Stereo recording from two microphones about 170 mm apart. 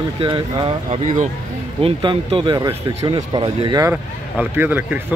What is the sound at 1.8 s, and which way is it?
Speech, 30° right (ahead or behind).